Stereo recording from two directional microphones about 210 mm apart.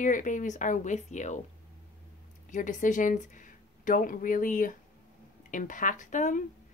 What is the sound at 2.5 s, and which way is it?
Speech, 35° left (ahead or behind).